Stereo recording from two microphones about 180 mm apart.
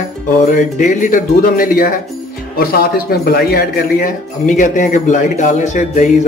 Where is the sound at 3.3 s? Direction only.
55° left (ahead or behind).